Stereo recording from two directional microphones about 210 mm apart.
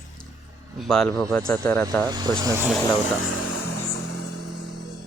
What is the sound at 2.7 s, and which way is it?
Speech, centre (ahead or behind).